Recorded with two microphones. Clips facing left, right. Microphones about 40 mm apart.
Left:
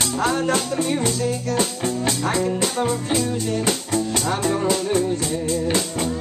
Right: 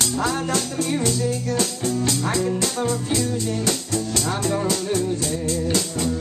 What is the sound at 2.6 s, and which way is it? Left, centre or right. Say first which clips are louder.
Speech: left 2 dB; left.